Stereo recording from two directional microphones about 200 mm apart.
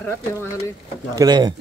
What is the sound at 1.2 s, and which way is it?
Speech, 20° right (ahead or behind).